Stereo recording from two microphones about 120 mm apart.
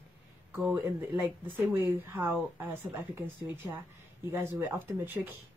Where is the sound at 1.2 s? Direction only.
20° right (ahead or behind).